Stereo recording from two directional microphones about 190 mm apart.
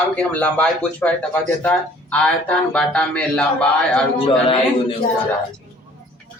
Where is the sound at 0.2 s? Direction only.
5° left (ahead or behind).